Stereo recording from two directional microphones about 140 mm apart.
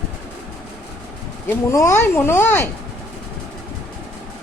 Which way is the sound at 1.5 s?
20° left (ahead or behind).